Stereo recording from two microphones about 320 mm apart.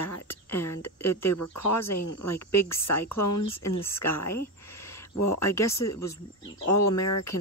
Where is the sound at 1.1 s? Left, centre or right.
Left.